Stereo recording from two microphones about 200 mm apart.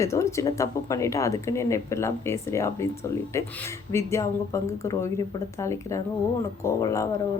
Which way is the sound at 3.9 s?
15° left (ahead or behind).